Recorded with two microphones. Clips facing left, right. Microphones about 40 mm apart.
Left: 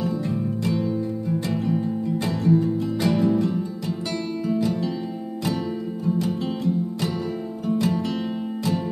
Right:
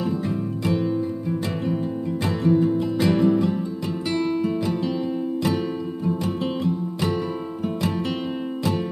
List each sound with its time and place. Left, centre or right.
2.2 s music: right
3.0 s music: centre
4.5 s music: right
6.0 s music: right